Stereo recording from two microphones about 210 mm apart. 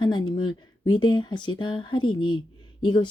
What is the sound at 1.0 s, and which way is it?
Speech, 20° left (ahead or behind).